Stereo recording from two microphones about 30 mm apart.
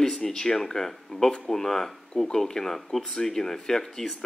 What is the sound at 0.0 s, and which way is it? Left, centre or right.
A man's voice, centre.